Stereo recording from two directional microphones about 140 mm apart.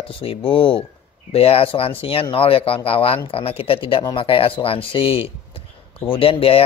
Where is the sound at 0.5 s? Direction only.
40° left (ahead or behind).